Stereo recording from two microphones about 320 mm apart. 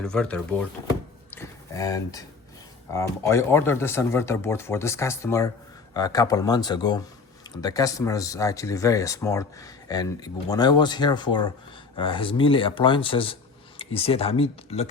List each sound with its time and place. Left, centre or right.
0.0 s speech: centre
1.3 s a sound: centre
2.9 s speech: centre